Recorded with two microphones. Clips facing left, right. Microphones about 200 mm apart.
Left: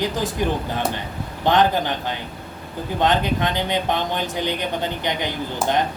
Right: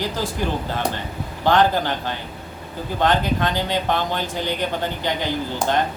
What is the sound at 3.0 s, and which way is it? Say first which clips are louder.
Speech: even; 20° left (ahead or behind).